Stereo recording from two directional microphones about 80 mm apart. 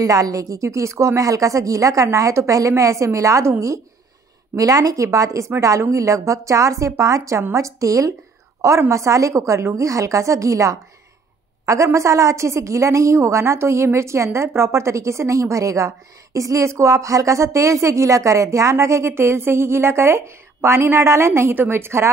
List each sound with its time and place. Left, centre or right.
0.0 s a woman's voice: right